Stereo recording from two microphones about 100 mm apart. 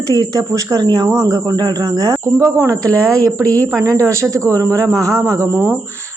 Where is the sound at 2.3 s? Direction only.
25° right (ahead or behind).